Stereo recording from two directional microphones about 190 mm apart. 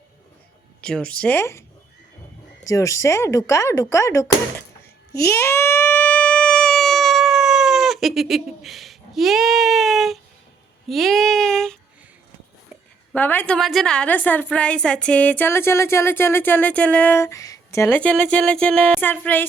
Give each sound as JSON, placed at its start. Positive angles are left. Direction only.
{"t": 0.8, "sound": "speech", "side_deg": 5}
{"t": 2.6, "sound": "a woman's voice", "side_deg": 15}
{"t": 5.2, "sound": "a sound", "side_deg": 15}
{"t": 13.1, "sound": "a woman's voice", "side_deg": 10}